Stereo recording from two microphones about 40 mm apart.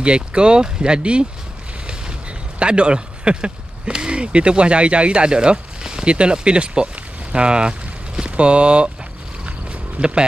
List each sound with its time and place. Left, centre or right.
0.0 s speech: right
2.6 s speech: right
9.9 s speech: right